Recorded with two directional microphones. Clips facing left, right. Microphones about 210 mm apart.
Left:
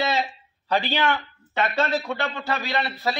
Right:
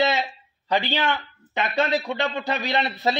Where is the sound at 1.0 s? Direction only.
15° right (ahead or behind).